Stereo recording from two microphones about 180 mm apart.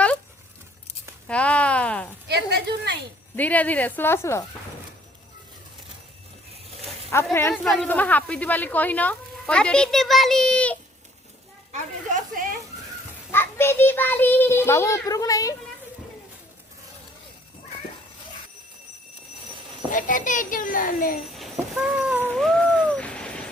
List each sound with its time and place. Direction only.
1.3 s a sound: 5° left (ahead or behind)
2.2 s speech: 70° right (ahead or behind)
3.3 s a child's voice: 10° left (ahead or behind)
7.1 s a child's voice: 15° left (ahead or behind)
7.5 s a woman's voice: centre (ahead or behind)
11.7 s a woman's voice: 45° right (ahead or behind)
13.3 s a child's voice: 10° left (ahead or behind)
19.9 s a child's voice: 45° left (ahead or behind)
21.2 s train: centre (ahead or behind)
22.2 s a sound: 5° left (ahead or behind)